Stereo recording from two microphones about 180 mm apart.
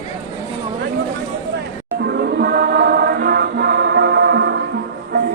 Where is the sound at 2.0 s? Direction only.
65° right (ahead or behind).